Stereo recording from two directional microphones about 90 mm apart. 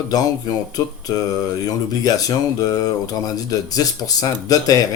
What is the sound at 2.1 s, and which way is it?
Speech, 45° left (ahead or behind).